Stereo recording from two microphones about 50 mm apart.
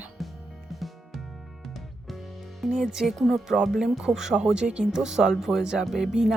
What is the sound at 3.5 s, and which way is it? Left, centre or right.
Speech, centre.